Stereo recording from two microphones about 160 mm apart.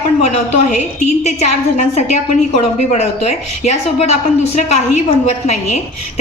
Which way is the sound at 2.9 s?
45° left (ahead or behind).